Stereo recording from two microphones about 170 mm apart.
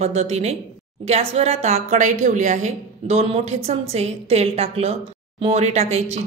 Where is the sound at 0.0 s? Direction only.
40° right (ahead or behind).